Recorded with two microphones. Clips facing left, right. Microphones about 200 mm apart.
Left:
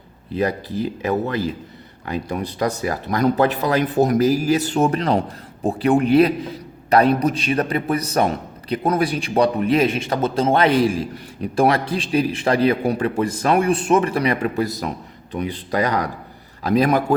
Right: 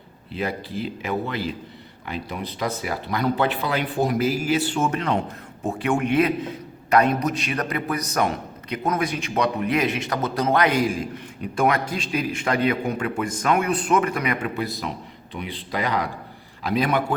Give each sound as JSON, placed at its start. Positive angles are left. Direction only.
{"t": 0.3, "sound": "a man's voice", "side_deg": 40}